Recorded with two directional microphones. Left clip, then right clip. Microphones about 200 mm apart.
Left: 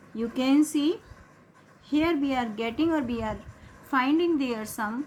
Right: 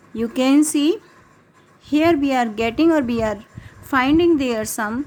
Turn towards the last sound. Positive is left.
turn(degrees=-50)  # may be behind; listen again after turning